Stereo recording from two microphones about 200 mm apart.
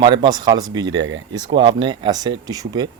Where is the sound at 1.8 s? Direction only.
25° right (ahead or behind).